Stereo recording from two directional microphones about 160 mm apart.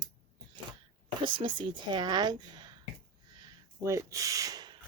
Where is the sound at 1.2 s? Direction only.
30° right (ahead or behind).